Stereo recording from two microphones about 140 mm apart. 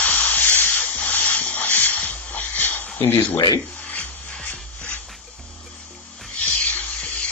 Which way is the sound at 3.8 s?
10° left (ahead or behind).